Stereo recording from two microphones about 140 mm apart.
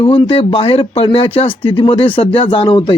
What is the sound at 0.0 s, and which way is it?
A man's voice, 40° left (ahead or behind).